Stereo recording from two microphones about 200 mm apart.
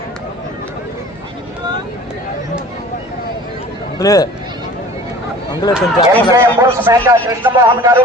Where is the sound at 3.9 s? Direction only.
20° left (ahead or behind).